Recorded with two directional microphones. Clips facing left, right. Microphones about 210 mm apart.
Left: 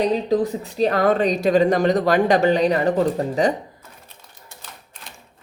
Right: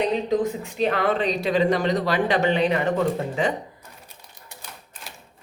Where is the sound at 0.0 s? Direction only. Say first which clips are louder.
Left 3 dB; 35° left (ahead or behind).